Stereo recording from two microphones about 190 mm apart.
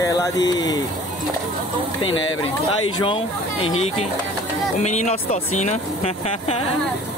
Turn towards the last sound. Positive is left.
turn(degrees=35)  # may be behind; listen again after turning